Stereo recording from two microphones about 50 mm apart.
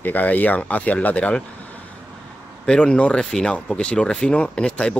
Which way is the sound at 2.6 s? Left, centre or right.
Centre.